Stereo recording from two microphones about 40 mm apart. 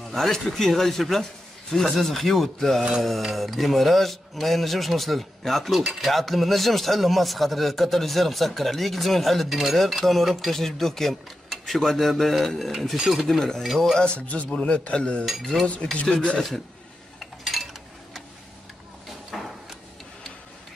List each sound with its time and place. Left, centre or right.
0.1 s speech: centre
14.2 s a man's voice: left
14.6 s cutlery: left
16.3 s speech: centre
17.2 s a sound: centre
19.3 s a sound: centre